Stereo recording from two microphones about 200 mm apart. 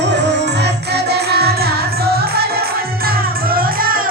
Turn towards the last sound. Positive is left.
turn(degrees=-45)  # may be behind; listen again after turning